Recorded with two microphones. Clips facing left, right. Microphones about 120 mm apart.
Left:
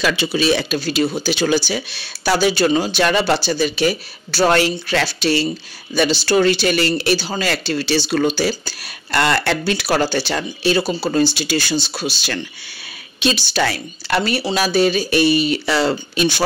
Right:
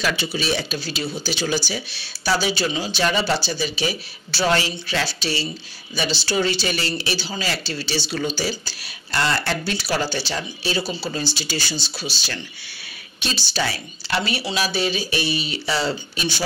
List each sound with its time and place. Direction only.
0.0 s speech: 90° left
0.7 s speech: 55° left (ahead or behind); by 9.8 s 85° left
9.8 s speech: 60° left (ahead or behind)
11.3 s speech: 60° left (ahead or behind)